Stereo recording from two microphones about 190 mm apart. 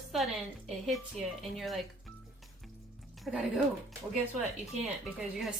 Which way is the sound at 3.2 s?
5° right (ahead or behind).